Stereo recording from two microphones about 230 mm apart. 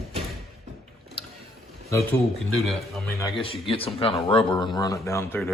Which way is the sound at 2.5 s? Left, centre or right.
Centre.